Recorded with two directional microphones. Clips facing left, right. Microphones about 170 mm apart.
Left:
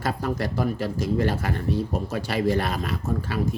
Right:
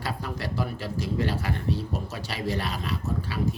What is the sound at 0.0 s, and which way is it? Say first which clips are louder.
Speech: left 6 dB; 45° left (ahead or behind).